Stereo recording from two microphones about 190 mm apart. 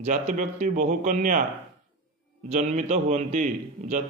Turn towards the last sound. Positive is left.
turn(degrees=-40)  # may be behind; listen again after turning